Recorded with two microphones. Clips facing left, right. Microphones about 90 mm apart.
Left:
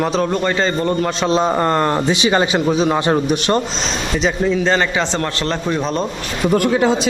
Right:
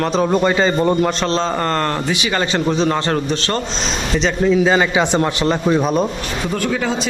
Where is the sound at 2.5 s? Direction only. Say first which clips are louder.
Left 1 dB; 5° left (ahead or behind).